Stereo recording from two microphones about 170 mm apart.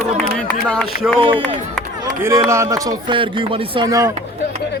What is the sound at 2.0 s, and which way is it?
Speech, 20° right (ahead or behind).